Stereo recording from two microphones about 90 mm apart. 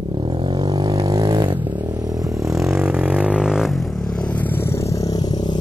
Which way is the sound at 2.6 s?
25° right (ahead or behind).